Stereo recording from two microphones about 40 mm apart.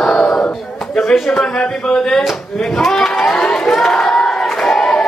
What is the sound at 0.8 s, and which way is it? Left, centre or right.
Speech, centre.